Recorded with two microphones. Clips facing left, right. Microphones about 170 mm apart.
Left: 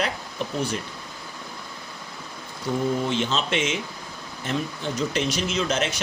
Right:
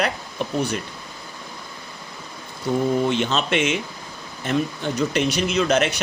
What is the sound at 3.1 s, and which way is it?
Speech, 65° right (ahead or behind).